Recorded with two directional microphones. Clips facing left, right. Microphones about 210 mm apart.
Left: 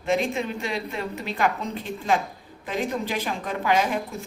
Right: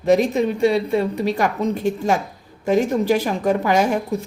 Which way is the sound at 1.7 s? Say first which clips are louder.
Right 5 dB; 45° right (ahead or behind).